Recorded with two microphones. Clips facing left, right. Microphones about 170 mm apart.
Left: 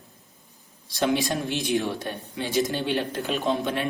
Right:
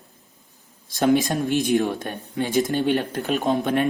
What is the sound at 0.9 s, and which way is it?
Speech, 50° right (ahead or behind).